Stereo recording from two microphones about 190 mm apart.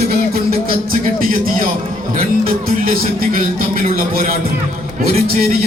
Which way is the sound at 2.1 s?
50° right (ahead or behind).